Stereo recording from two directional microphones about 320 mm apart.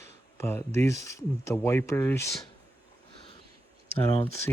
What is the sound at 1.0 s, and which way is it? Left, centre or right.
Speech, centre.